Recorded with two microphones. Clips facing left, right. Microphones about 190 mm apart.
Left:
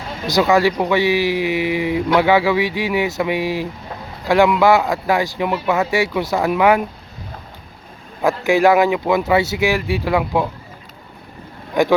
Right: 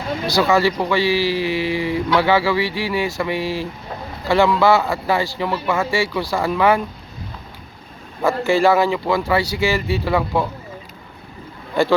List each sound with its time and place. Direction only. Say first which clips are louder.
0.3 s speech: left 2 dB; 15° left (ahead or behind)
8.2 s speech: left 1 dB; 15° left (ahead or behind)
11.7 s speech: left 2 dB; 15° left (ahead or behind)